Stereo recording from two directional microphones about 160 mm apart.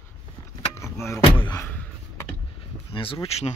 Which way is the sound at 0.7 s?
15° left (ahead or behind).